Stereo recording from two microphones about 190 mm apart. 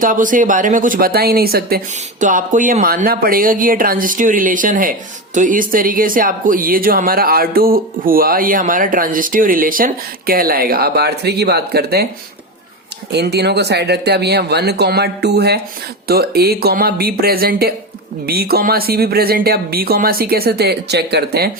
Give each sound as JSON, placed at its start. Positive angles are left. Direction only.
{"t": 0.0, "sound": "speech", "side_deg": -45}
{"t": 2.2, "sound": "speech", "side_deg": -40}
{"t": 13.1, "sound": "speech", "side_deg": -60}